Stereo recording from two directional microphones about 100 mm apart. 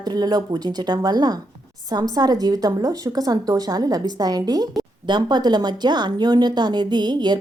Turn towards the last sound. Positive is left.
turn(degrees=-45)  # may be behind; listen again after turning